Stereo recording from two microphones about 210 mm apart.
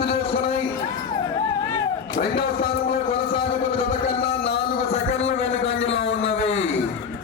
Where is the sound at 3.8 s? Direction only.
25° left (ahead or behind).